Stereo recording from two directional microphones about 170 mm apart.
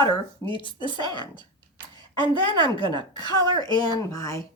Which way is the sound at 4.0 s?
20° left (ahead or behind).